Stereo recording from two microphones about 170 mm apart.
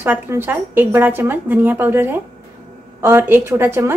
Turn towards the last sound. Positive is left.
turn(degrees=-15)  # may be behind; listen again after turning